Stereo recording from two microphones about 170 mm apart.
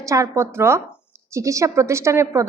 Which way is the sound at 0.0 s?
20° right (ahead or behind).